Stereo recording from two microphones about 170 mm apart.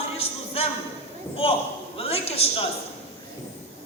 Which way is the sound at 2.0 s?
35° left (ahead or behind).